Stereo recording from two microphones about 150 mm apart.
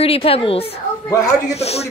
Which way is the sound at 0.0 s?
40° left (ahead or behind).